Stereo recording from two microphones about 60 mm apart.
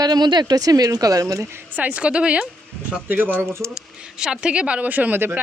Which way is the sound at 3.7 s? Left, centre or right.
Centre.